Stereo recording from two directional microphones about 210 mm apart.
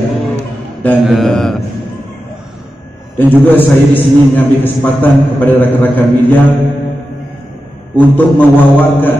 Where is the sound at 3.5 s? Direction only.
10° left (ahead or behind).